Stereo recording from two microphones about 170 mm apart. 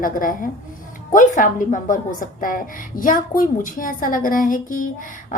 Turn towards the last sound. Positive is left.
turn(degrees=50)  # may be behind; listen again after turning